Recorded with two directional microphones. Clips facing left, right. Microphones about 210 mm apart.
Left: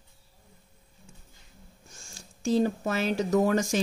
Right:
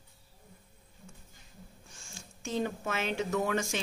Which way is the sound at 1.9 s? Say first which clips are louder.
Left 1 dB; 40° left (ahead or behind).